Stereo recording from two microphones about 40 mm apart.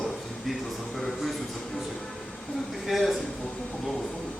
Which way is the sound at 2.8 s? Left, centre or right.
Centre.